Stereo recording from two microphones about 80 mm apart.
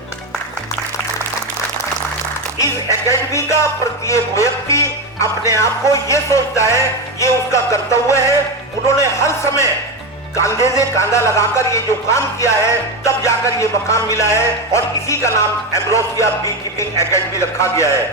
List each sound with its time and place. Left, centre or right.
2.6 s speech: left